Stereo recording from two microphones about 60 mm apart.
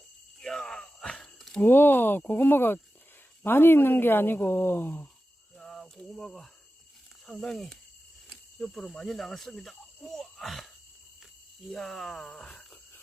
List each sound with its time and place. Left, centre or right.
0.3 s groan: centre
1.6 s speech: left
5.5 s cricket: centre
6.1 s speech: centre
11.7 s speech: centre